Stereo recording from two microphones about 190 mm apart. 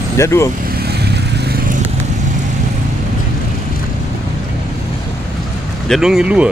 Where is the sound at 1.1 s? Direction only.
55° right (ahead or behind).